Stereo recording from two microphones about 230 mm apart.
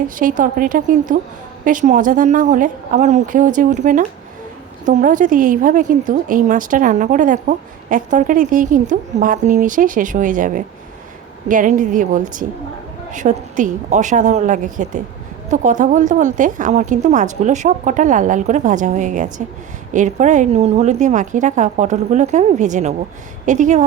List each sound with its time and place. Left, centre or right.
0.2 s a woman's voice: right